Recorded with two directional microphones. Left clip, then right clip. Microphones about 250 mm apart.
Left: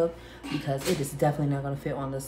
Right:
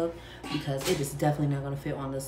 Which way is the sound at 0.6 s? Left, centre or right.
Centre.